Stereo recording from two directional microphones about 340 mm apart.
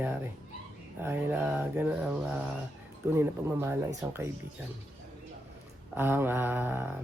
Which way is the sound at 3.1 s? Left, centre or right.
Centre.